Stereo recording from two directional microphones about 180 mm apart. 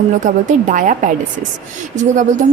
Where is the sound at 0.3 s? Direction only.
45° right (ahead or behind).